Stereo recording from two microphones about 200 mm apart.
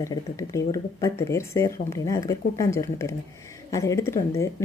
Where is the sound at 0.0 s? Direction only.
15° left (ahead or behind).